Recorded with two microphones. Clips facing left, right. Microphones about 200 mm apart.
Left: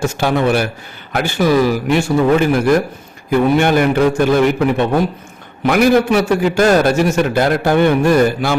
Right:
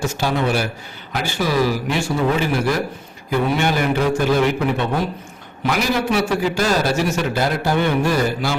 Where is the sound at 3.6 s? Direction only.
50° left (ahead or behind).